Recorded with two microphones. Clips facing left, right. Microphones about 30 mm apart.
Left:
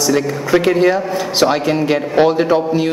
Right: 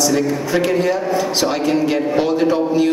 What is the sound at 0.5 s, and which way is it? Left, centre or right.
A man's voice, left.